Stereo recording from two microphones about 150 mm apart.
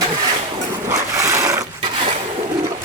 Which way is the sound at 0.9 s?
20° right (ahead or behind).